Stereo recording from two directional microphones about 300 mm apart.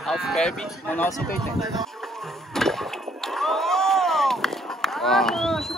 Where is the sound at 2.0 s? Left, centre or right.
Centre.